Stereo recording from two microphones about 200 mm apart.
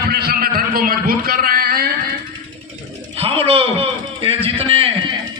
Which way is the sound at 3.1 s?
30° right (ahead or behind).